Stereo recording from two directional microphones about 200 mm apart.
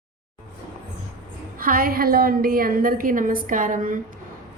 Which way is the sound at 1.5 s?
45° right (ahead or behind).